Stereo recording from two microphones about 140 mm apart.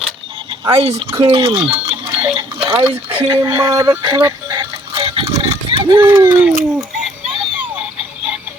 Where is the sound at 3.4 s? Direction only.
20° right (ahead or behind); by 5.8 s 45° right (ahead or behind).